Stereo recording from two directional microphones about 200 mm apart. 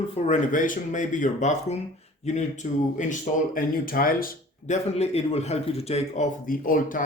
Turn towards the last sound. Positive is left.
turn(degrees=45)  # may be behind; listen again after turning